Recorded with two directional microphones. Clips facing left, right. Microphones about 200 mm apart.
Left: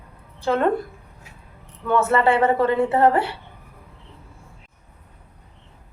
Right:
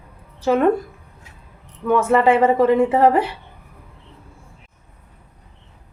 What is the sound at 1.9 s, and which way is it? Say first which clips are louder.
A woman's voice: right 3 dB; 15° right (ahead or behind).